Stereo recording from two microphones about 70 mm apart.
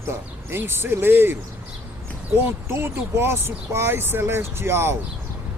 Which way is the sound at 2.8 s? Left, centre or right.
Right.